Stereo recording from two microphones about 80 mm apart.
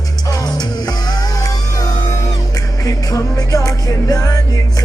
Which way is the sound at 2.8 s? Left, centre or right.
Left.